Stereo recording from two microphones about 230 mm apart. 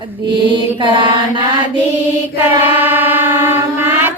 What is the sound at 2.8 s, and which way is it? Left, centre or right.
Music, centre.